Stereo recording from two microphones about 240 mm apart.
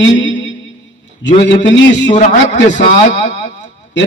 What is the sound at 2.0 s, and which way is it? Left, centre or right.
A man's voice, left.